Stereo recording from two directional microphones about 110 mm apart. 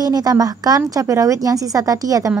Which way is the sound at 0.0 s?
35° right (ahead or behind).